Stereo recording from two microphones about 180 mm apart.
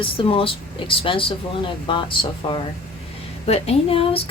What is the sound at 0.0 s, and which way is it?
Speech, 30° left (ahead or behind).